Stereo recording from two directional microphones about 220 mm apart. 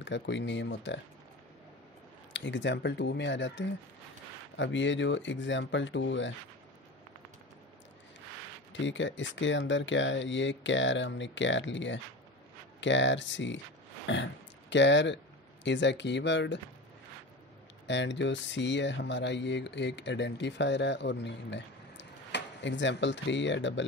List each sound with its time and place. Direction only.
0.0 s speech: 55° left (ahead or behind)
2.3 s speech: 55° left (ahead or behind)
8.7 s speech: 55° left (ahead or behind)
17.8 s speech: 55° left (ahead or behind)